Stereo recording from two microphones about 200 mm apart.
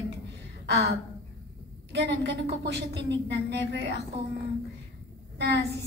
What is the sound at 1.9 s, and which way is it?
A woman's voice, 60° right (ahead or behind).